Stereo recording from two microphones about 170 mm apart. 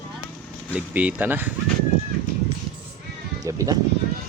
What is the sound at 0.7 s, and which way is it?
Speech, 10° right (ahead or behind).